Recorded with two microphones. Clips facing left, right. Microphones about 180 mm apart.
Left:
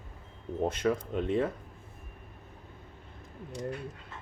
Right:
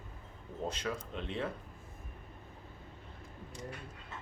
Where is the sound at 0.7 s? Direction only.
50° left (ahead or behind).